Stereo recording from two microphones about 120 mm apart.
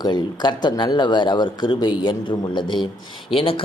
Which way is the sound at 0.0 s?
35° left (ahead or behind).